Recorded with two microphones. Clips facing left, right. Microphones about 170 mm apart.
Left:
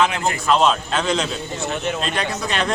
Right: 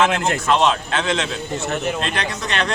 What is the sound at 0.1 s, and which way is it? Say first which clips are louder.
Speech: right 3 dB; 85° right.